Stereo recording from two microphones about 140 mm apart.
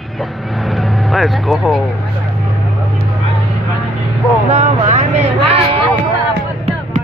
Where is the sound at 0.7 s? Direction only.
Centre (ahead or behind).